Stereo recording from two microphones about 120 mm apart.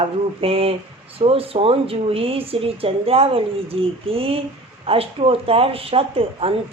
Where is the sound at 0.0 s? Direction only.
55° right (ahead or behind).